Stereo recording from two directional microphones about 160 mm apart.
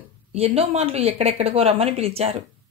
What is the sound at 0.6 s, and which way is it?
Speech, 40° right (ahead or behind).